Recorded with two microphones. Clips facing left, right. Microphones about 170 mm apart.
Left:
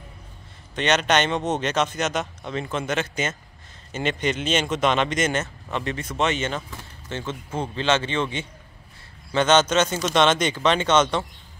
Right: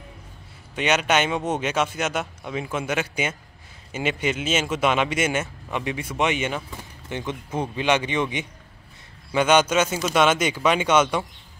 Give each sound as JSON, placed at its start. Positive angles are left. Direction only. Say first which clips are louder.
{"t": 0.7, "sound": "speech", "louder": "even", "side_deg": -10}